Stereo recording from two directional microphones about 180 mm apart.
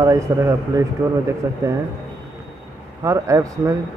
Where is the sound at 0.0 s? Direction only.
20° right (ahead or behind).